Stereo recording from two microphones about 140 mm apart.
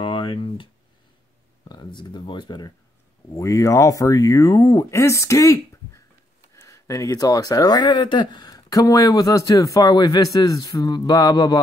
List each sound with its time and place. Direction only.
0.0 s a sound: 35° left (ahead or behind)
1.6 s speech: 35° left (ahead or behind)
3.3 s speech: 20° left (ahead or behind)